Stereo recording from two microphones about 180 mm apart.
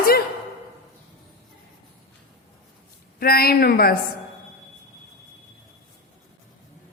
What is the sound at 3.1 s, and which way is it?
Speech, 60° left (ahead or behind).